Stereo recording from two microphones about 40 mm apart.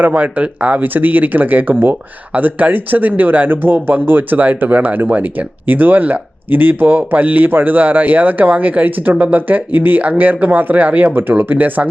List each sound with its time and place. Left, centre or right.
0.0 s speech: right
0.8 s speech: right
11.1 s speech: right
11.3 s speech: right